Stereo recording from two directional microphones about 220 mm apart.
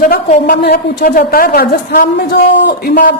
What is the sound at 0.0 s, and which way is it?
A woman's voice, 40° left (ahead or behind).